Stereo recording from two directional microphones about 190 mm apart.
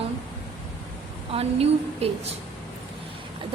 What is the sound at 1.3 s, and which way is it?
Speech, 30° right (ahead or behind).